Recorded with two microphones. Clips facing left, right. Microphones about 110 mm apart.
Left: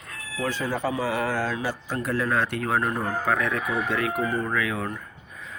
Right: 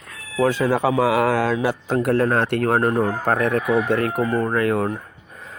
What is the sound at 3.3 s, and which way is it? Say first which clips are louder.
Speech: right 7 dB; 55° right (ahead or behind).